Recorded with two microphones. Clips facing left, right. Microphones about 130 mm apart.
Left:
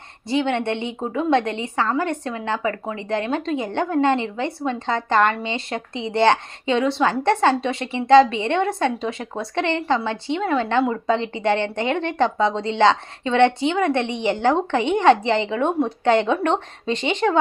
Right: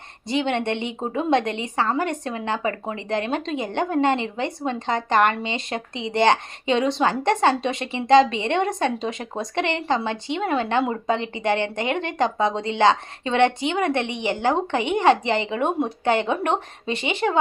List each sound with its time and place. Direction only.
0.3 s a woman's voice: 20° right (ahead or behind)